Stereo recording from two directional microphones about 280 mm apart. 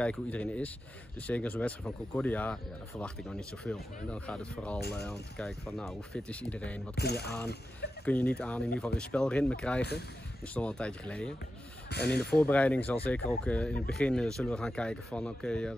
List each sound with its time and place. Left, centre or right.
0.0 s speech: centre
7.0 s speech: left
8.0 s speech: centre
11.9 s speech: left
12.3 s speech: centre